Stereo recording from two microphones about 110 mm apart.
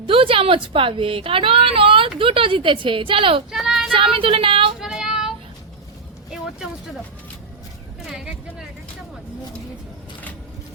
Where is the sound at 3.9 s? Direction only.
55° right (ahead or behind).